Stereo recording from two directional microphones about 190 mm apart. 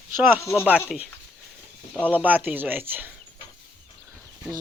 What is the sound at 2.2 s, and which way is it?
Speech, 10° right (ahead or behind).